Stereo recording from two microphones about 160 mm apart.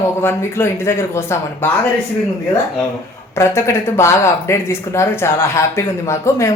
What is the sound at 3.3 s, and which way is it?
A woman's voice, 15° left (ahead or behind).